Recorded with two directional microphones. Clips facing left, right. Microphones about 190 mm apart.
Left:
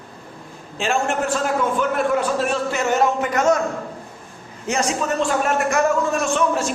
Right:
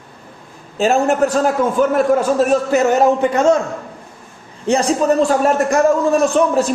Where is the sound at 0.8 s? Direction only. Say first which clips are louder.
Right 7 dB; 40° right (ahead or behind).